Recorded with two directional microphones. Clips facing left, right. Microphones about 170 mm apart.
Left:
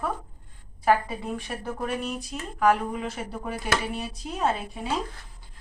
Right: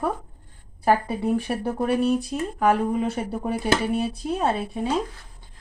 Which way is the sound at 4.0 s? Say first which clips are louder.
Right 4 dB; 30° right (ahead or behind).